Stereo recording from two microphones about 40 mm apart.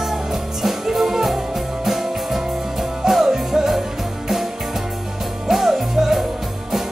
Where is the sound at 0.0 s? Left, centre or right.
Centre.